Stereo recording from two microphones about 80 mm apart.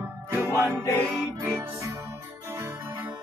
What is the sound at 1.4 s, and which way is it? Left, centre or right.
Music, right.